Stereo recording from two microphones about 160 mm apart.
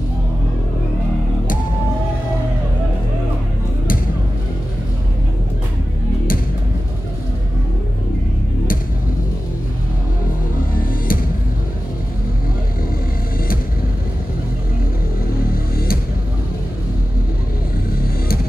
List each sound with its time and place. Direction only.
10.7 s music: 65° left (ahead or behind)
15.2 s music: 65° left (ahead or behind)